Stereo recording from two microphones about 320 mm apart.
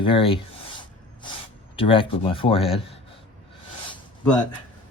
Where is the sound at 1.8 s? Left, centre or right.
Centre.